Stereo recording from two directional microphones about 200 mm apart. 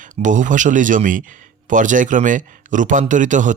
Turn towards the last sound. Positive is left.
turn(degrees=-40)  # may be behind; listen again after turning